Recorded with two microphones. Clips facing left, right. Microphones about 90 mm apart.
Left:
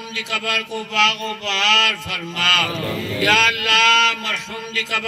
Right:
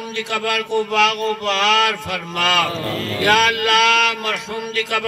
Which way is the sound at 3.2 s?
50° right (ahead or behind).